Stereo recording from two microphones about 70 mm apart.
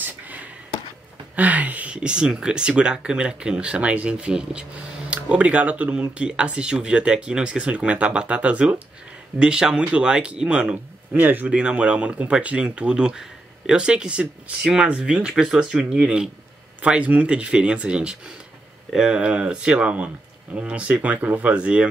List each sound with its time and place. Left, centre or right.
1.3 s speech: right